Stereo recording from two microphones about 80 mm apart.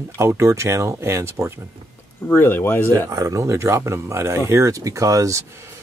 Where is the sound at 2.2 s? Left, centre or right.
Left.